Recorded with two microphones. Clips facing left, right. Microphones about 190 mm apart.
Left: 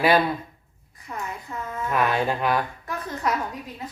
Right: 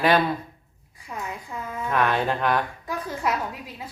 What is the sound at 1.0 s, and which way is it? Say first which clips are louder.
Speech: even; 10° right (ahead or behind).